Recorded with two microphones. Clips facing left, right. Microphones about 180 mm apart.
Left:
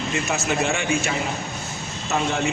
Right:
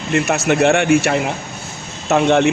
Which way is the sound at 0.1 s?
70° right (ahead or behind).